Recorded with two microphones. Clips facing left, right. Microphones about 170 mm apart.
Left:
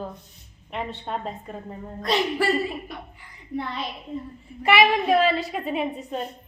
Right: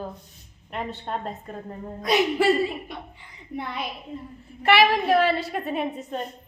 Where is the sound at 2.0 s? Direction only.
20° right (ahead or behind).